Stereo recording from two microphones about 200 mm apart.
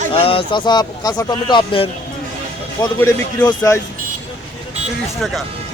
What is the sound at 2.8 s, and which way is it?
Speech, 10° left (ahead or behind).